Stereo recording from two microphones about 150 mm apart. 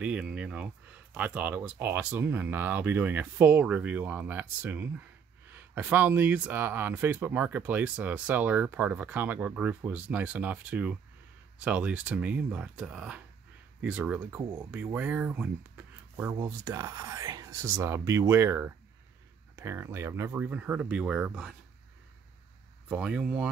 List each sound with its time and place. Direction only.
0.0 s speech: 10° right (ahead or behind)
16.4 s speech: 20° right (ahead or behind); by 21.5 s 5° right (ahead or behind)
22.8 s speech: 5° right (ahead or behind)